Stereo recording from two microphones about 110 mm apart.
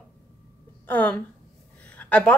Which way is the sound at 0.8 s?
15° left (ahead or behind).